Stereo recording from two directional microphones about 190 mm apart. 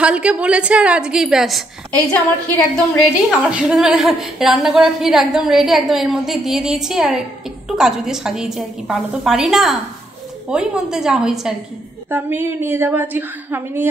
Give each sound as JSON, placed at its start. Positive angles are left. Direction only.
{"t": 0.0, "sound": "a woman's voice", "side_deg": -5}
{"t": 2.1, "sound": "a woman's voice", "side_deg": 15}
{"t": 3.2, "sound": "a woman's voice", "side_deg": -5}